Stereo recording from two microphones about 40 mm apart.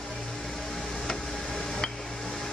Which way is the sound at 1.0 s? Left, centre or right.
Centre.